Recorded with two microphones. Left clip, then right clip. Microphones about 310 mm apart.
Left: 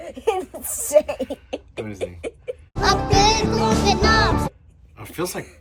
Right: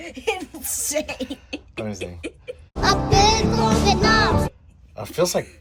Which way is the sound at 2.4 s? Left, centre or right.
Centre.